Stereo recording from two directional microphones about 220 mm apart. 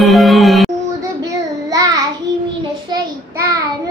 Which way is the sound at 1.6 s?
15° right (ahead or behind).